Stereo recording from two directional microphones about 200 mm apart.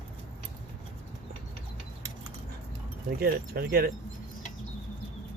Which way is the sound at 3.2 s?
50° right (ahead or behind).